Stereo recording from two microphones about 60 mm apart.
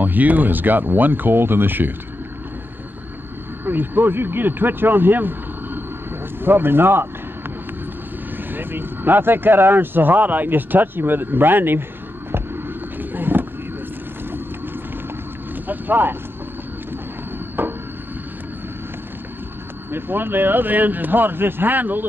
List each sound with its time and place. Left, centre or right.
0.0 s speech: right
3.6 s speech: right
8.5 s speech: right
12.3 s vehicle: right
15.6 s vehicle: right
17.6 s a sound: right
19.9 s speech: right